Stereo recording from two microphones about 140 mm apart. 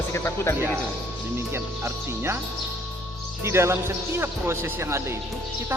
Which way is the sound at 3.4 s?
20° right (ahead or behind).